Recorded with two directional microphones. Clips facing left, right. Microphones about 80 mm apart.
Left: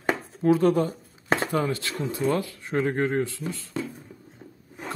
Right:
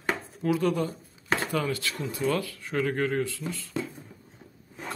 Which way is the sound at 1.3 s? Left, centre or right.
Left.